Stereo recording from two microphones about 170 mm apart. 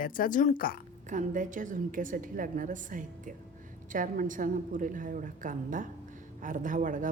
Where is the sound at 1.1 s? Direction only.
50° right (ahead or behind).